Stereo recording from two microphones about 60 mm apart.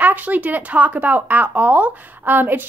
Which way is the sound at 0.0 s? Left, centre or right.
Right.